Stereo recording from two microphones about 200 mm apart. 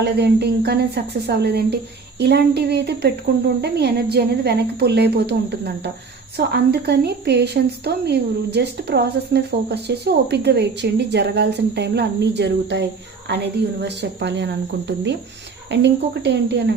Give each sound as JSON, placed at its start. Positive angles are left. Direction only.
{"t": 0.0, "sound": "speech", "side_deg": -55}